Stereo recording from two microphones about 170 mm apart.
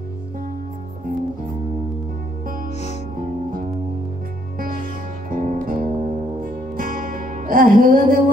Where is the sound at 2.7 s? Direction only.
40° left (ahead or behind).